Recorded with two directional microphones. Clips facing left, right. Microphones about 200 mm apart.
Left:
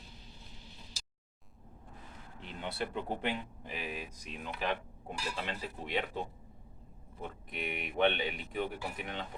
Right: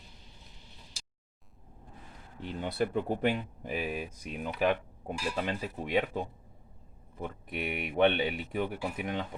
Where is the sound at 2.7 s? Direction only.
45° right (ahead or behind).